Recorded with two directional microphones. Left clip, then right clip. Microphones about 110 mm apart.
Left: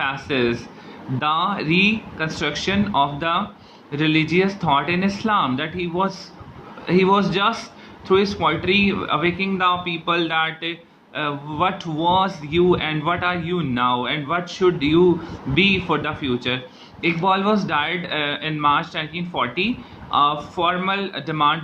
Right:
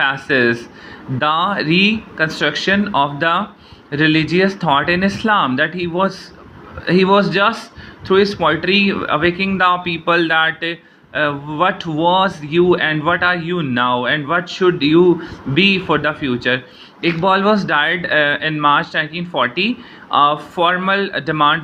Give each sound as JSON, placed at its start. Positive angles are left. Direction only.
{"t": 0.0, "sound": "speech", "side_deg": -40}